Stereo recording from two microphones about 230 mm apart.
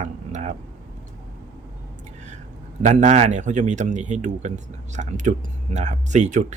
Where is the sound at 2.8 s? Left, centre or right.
Right.